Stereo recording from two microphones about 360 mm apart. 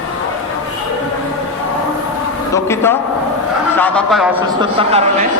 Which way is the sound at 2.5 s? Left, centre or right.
Centre.